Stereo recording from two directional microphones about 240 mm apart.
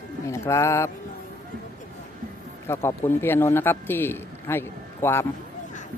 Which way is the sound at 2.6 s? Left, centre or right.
Centre.